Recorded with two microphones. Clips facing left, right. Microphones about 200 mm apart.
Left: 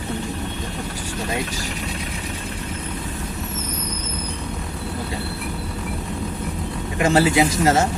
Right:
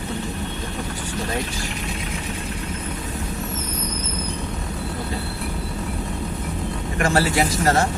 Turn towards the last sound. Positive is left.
turn(degrees=20)  # may be behind; listen again after turning